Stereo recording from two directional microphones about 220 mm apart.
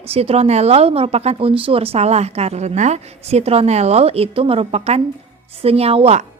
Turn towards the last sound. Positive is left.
turn(degrees=-30)  # may be behind; listen again after turning